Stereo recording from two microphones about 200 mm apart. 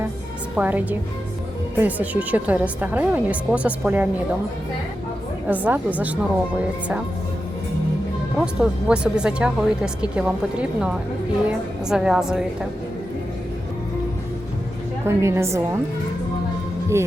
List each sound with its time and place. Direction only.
0.5 s speech: 10° right (ahead or behind)
5.5 s speech: 10° right (ahead or behind)
8.4 s speech: 5° right (ahead or behind)
15.0 s speech: 15° right (ahead or behind)